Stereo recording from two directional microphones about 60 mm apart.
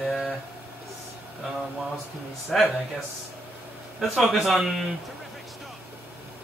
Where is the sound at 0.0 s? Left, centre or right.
Centre.